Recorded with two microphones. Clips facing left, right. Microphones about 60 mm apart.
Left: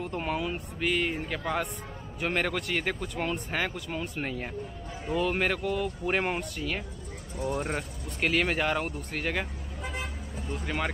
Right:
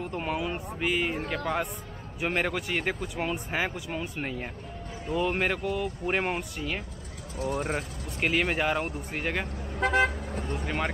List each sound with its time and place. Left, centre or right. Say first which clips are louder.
0.0 s speech: even; centre
1.2 s speech: right 2 dB; centre
2.1 s speech: right 1 dB; centre
9.8 s car: right 13 dB; right
10.5 s speech: even; centre